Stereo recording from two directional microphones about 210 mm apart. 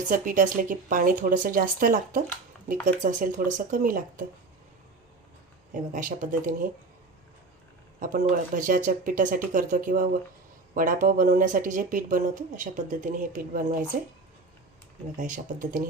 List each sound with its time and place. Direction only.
0.1 s speech: 40° right (ahead or behind)
5.9 s speech: 40° right (ahead or behind)
7.9 s speech: 40° right (ahead or behind)
15.2 s speech: 40° right (ahead or behind)